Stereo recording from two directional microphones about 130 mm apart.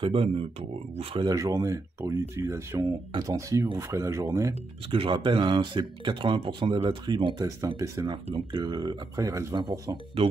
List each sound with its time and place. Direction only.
0.0 s speech: 45° right (ahead or behind)
1.2 s speech: 25° right (ahead or behind)
4.9 s speech: 45° right (ahead or behind)
7.4 s speech: 25° right (ahead or behind)